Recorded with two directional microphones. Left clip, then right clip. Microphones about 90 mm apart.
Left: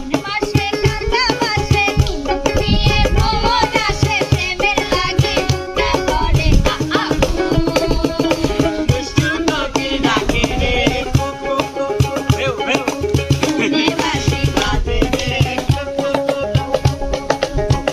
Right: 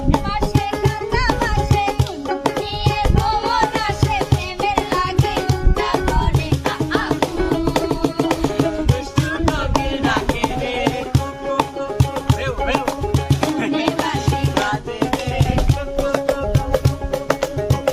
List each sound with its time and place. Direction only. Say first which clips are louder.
2.9 s music: even; 10° right (ahead or behind)
3.5 s music: left 3 dB; 20° right (ahead or behind)
7.3 s music: left 3 dB; 10° left (ahead or behind)
9.2 s music: left 3 dB; 45° right (ahead or behind)
13.6 s music: left 6 dB; 15° right (ahead or behind)